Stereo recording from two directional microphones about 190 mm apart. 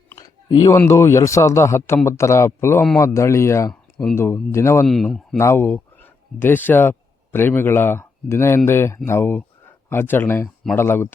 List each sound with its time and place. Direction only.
0.1 s a sound: 20° left (ahead or behind)
0.8 s speech: 15° left (ahead or behind)
4.9 s speech: centre (ahead or behind)
5.4 s speech: 15° left (ahead or behind)